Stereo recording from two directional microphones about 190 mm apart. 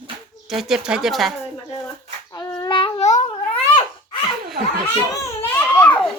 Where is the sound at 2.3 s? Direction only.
20° left (ahead or behind); by 3.6 s 40° left (ahead or behind).